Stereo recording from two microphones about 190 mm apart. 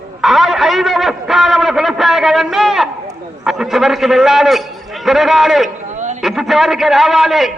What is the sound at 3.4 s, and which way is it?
A man's voice, centre (ahead or behind).